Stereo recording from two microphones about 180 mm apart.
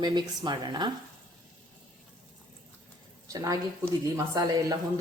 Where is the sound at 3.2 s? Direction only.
20° right (ahead or behind).